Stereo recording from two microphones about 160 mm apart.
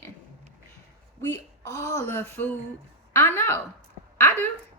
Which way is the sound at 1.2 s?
15° left (ahead or behind).